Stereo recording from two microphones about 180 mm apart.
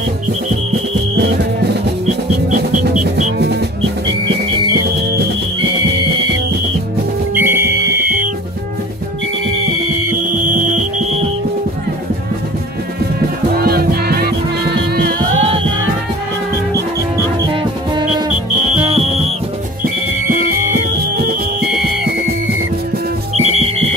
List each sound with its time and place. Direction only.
2.8 s music: 45° right (ahead or behind)
7.3 s music: 15° right (ahead or behind)
8.0 s music: 55° right (ahead or behind)
13.5 s music: 60° right (ahead or behind)
15.3 s music: 30° right (ahead or behind)
18.7 s music: 35° right (ahead or behind)
20.3 s music: 60° right (ahead or behind)
23.3 s music: 35° right (ahead or behind)